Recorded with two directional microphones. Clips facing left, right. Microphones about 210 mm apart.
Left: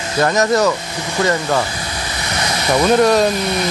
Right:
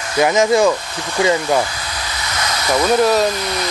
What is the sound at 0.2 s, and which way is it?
Speech, 10° right (ahead or behind).